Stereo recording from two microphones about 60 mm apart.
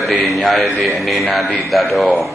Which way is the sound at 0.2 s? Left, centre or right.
Centre.